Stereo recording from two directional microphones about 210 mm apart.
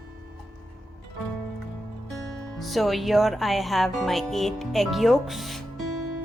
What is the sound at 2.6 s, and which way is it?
Music, centre (ahead or behind).